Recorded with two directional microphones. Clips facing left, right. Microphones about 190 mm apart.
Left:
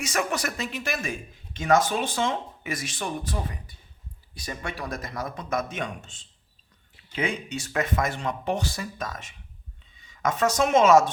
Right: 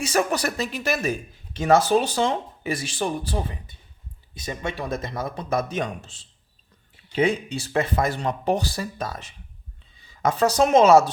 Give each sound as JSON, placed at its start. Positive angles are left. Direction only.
{"t": 0.0, "sound": "a man's voice", "side_deg": -35}